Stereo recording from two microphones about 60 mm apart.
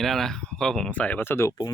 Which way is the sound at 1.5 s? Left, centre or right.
Left.